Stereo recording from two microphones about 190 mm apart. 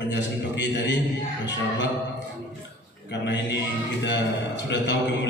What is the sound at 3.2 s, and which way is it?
A man's voice, 65° left (ahead or behind).